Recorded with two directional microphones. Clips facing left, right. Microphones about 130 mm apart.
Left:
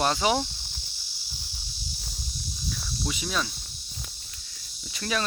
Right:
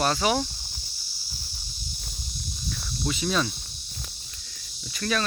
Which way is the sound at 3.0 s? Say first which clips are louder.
Right 5 dB; 5° left (ahead or behind).